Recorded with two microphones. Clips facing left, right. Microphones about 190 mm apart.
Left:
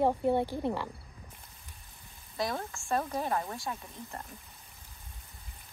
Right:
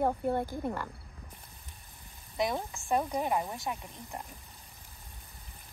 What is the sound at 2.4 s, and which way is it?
Speech, 20° right (ahead or behind).